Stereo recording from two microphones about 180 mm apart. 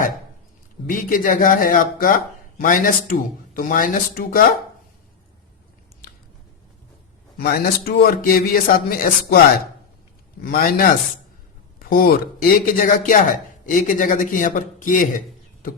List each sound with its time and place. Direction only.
0.9 s speech: 50° left (ahead or behind)
7.3 s a man's voice: 60° left (ahead or behind)
10.4 s speech: 50° left (ahead or behind)